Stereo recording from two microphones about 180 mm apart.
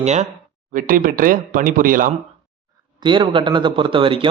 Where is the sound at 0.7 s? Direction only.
50° right (ahead or behind).